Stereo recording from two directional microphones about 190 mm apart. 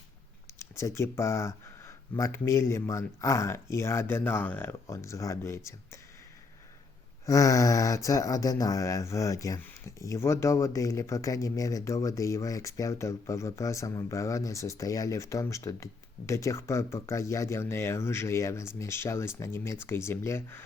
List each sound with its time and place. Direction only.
0.6 s speech: 15° left (ahead or behind)
7.3 s speech: 15° left (ahead or behind)